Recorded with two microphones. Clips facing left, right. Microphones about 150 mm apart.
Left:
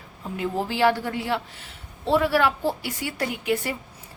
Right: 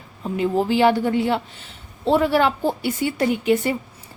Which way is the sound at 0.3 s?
20° right (ahead or behind).